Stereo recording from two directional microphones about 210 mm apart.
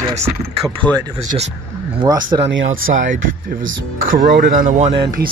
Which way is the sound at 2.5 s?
70° right (ahead or behind).